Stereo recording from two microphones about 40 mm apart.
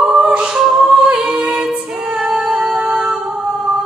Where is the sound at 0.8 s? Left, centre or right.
Right.